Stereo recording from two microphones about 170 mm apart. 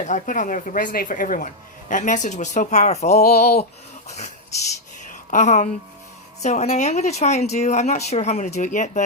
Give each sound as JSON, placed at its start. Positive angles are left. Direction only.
{"t": 0.0, "sound": "speech", "side_deg": 45}
{"t": 3.2, "sound": "speech", "side_deg": 65}
{"t": 5.3, "sound": "speech", "side_deg": 45}